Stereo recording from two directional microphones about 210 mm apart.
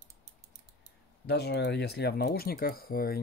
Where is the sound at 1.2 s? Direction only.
50° left (ahead or behind).